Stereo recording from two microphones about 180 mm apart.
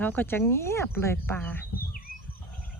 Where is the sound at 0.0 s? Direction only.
10° left (ahead or behind).